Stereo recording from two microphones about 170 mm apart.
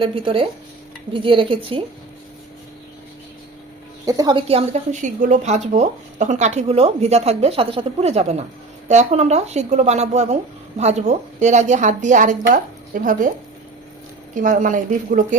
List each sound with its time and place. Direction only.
0.0 s a woman's voice: 30° right (ahead or behind)
4.0 s a woman's voice: 25° right (ahead or behind); by 13.3 s 50° right (ahead or behind)
14.3 s a woman's voice: 50° right (ahead or behind)